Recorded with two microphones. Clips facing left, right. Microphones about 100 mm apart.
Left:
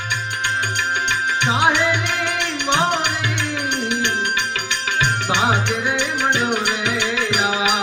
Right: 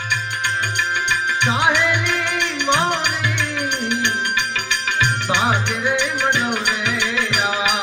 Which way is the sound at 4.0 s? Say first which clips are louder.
Even; 30° left (ahead or behind).